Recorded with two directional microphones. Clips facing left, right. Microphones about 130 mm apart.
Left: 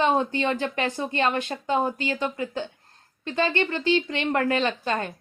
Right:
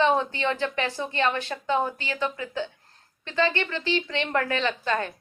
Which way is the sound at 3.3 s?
50° left (ahead or behind).